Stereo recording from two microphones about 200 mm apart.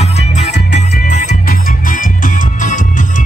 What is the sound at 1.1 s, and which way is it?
Music, 40° left (ahead or behind).